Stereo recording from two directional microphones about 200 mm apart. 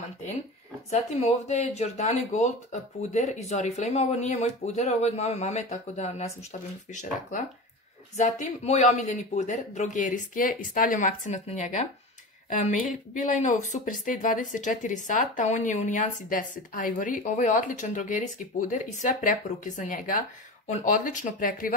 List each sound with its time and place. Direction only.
0.8 s speech: 35° left (ahead or behind)